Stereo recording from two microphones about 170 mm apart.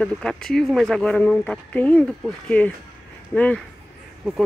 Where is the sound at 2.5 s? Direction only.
10° left (ahead or behind).